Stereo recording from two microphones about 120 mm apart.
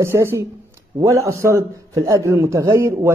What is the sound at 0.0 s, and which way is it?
A man's voice, 20° right (ahead or behind).